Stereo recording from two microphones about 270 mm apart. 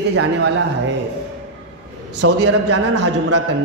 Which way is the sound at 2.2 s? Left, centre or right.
Right.